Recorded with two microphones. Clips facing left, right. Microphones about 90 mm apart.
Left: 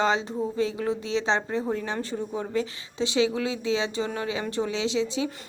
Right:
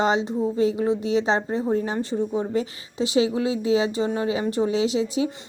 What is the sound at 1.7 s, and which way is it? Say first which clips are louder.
A woman's voice: right 6 dB; 35° right (ahead or behind).